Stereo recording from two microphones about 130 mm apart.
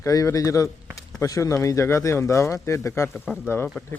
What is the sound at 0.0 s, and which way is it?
Speech, 25° left (ahead or behind).